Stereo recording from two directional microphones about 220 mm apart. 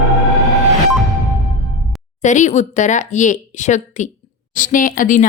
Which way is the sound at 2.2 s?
35° left (ahead or behind).